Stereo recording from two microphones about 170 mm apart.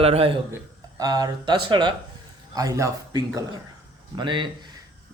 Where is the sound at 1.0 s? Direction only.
20° right (ahead or behind).